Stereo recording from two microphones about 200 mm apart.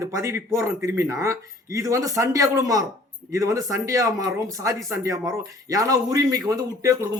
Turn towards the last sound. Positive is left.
turn(degrees=-15)  # may be behind; listen again after turning